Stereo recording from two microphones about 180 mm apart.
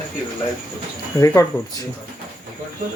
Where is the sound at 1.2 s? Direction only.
20° left (ahead or behind).